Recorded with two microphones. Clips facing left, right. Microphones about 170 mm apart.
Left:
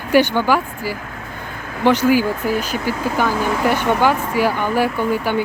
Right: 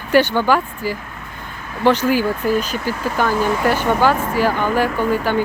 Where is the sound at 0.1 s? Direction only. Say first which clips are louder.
Even; 10° left (ahead or behind).